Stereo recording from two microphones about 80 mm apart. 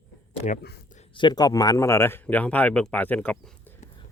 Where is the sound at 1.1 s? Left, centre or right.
Left.